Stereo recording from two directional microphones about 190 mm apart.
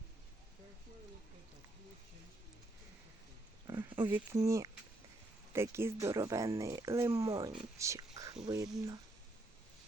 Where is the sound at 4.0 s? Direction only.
10° right (ahead or behind).